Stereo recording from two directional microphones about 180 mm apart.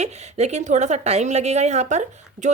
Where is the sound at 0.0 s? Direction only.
40° right (ahead or behind).